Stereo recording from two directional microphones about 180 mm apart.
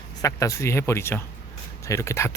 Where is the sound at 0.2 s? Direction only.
15° left (ahead or behind).